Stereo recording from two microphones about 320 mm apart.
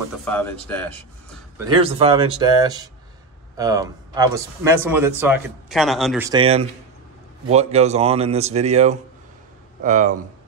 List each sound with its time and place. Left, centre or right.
0.2 s speech: centre
1.6 s a man's voice: centre